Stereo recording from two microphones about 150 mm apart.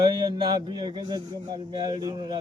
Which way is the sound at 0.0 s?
30° right (ahead or behind).